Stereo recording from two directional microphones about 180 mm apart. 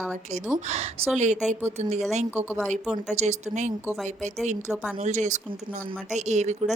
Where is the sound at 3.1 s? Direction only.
40° right (ahead or behind).